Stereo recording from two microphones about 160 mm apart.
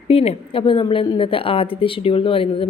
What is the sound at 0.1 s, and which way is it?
A woman's voice, 35° left (ahead or behind).